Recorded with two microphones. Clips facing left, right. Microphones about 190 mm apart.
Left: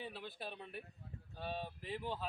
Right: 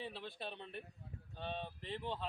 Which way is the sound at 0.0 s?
Centre (ahead or behind).